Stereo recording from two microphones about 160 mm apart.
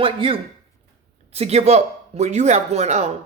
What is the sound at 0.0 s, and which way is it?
Speech, 35° right (ahead or behind).